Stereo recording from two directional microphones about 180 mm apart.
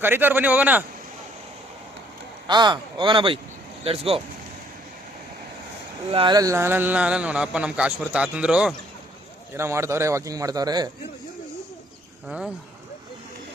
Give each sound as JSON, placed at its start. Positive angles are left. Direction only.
{"t": 0.0, "sound": "speech", "side_deg": -10}
{"t": 2.5, "sound": "speech", "side_deg": -25}
{"t": 6.1, "sound": "speech", "side_deg": -30}